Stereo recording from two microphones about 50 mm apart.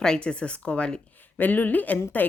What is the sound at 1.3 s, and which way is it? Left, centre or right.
Speech, left.